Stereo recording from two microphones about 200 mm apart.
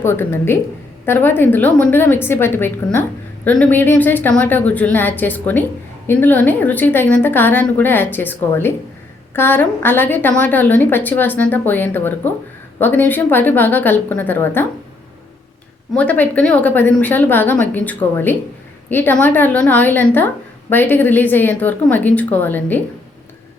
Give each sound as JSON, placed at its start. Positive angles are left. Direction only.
{"t": 0.0, "sound": "a woman's voice", "side_deg": 10}
{"t": 15.9, "sound": "a woman's voice", "side_deg": 5}